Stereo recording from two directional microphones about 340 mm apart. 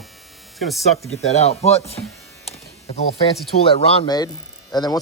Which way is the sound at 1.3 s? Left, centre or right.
Centre.